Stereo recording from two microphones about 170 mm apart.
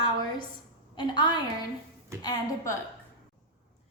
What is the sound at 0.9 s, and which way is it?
A woman's voice, 25° left (ahead or behind).